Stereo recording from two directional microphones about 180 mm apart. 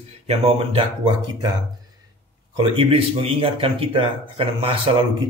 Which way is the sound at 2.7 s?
30° right (ahead or behind).